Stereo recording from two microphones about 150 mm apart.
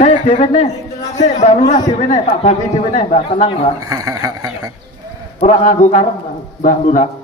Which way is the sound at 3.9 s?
20° right (ahead or behind).